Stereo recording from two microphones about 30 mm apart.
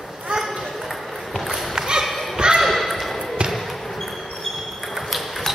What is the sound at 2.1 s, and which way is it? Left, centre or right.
Basketball bounce, centre.